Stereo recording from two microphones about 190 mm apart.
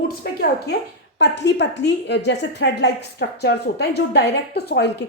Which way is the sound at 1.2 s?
65° left (ahead or behind).